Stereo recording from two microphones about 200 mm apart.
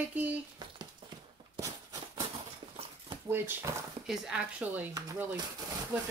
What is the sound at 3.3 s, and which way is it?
Speech, 10° right (ahead or behind).